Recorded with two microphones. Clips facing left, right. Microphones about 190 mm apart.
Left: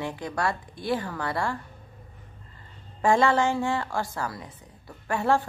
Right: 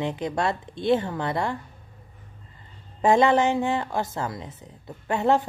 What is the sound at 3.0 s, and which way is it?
A woman's voice, 20° right (ahead or behind).